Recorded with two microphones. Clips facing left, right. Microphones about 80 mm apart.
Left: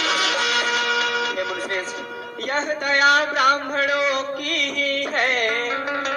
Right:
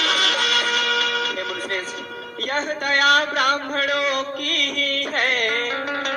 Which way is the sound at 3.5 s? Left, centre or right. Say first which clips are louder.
Left 2 dB; right.